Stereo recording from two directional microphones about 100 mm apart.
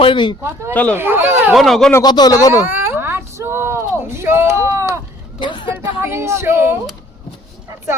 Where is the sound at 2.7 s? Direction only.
20° right (ahead or behind).